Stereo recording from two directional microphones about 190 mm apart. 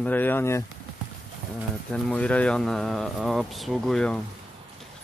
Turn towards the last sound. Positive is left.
turn(degrees=5)  # may be behind; listen again after turning